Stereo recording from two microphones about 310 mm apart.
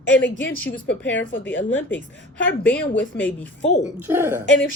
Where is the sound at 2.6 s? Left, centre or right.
Centre.